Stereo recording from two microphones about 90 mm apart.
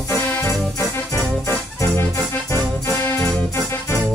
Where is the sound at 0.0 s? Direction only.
35° left (ahead or behind).